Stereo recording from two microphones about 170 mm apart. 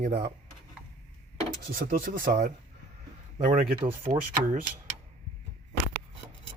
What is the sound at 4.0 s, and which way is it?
Speech, 45° right (ahead or behind).